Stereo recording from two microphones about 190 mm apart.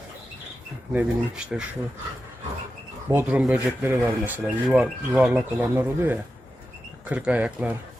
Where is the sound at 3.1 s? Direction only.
10° right (ahead or behind).